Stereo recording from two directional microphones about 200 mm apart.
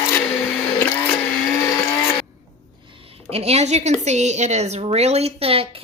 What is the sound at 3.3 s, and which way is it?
Speech, 30° right (ahead or behind).